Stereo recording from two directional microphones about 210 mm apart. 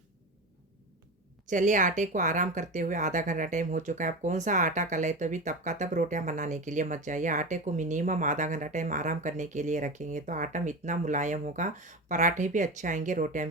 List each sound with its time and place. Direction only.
1.5 s speech: 35° right (ahead or behind)